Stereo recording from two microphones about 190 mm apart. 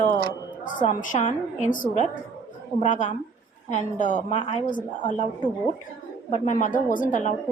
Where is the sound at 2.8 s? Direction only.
40° left (ahead or behind).